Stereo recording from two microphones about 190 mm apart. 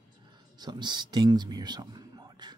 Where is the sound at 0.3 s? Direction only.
20° right (ahead or behind).